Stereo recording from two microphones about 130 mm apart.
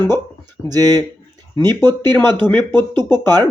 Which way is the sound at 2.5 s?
15° left (ahead or behind).